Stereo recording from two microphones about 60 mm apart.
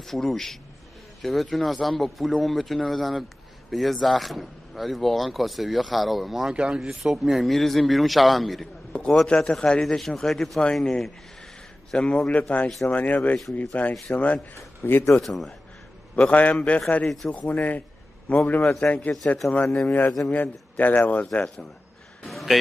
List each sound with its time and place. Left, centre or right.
0.0 s speech: centre
6.5 s speech: centre
7.4 s a man's voice: centre; by 14.4 s left
14.9 s speech: left
15.1 s speech: centre
16.2 s a man's voice: left
17.0 s speech: centre
17.3 s a man's voice: left
22.2 s a sound: centre